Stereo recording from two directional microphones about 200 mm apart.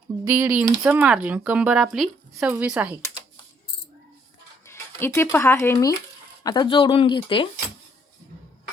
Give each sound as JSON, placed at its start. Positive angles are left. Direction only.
{"t": 0.3, "sound": "speech", "side_deg": -10}
{"t": 4.6, "sound": "speech", "side_deg": 10}